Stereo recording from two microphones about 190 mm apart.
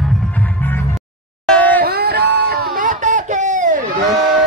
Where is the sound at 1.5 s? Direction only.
10° left (ahead or behind).